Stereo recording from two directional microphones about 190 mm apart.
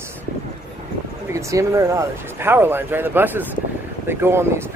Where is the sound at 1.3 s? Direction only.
15° right (ahead or behind).